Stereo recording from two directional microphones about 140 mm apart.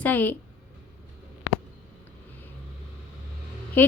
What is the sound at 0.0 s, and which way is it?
Speech, 10° left (ahead or behind).